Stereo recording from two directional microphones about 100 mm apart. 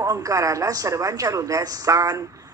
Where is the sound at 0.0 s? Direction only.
35° right (ahead or behind).